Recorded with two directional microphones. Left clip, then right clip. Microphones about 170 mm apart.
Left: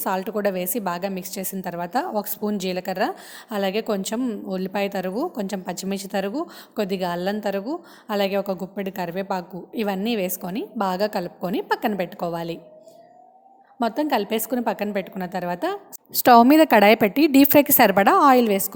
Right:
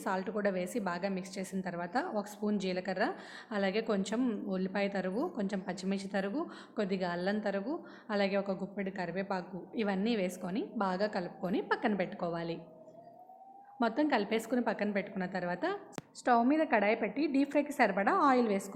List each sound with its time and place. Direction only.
0.0 s a woman's voice: 45° left (ahead or behind)
13.7 s a woman's voice: 40° left (ahead or behind)
16.1 s a woman's voice: 60° left (ahead or behind)